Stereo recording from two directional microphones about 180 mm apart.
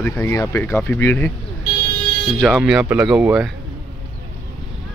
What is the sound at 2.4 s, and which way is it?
Speech, 5° right (ahead or behind).